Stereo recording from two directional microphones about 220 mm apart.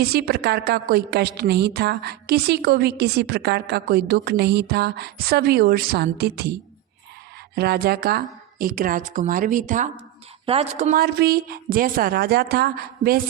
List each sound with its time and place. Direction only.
0.0 s a woman's voice: 45° right (ahead or behind)
7.5 s a woman's voice: 45° right (ahead or behind)